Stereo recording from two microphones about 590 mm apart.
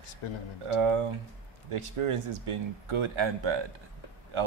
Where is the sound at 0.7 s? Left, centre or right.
Right.